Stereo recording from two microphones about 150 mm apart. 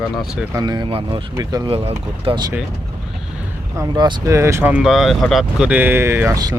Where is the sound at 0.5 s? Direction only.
30° right (ahead or behind).